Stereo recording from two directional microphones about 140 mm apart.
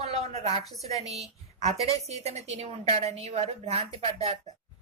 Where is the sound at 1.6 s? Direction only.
50° right (ahead or behind).